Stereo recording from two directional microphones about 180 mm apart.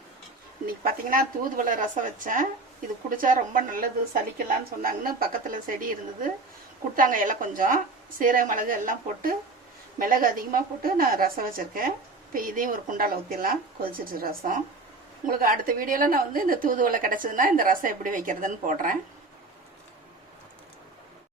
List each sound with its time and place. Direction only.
0.8 s a woman's voice: 50° right (ahead or behind)